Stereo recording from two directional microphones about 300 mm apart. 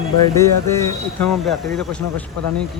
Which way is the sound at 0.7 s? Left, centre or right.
Centre.